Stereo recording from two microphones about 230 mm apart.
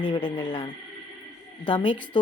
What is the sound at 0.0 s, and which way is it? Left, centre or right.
A woman's voice, left.